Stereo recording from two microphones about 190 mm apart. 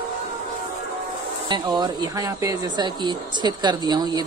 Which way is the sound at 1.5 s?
20° right (ahead or behind).